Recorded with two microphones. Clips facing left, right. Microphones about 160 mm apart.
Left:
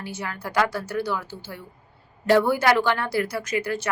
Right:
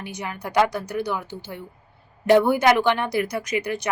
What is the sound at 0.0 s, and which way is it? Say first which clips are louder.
A woman's voice: right 1 dB; 20° right (ahead or behind).